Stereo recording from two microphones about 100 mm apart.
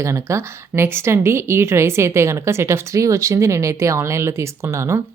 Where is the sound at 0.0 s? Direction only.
30° right (ahead or behind).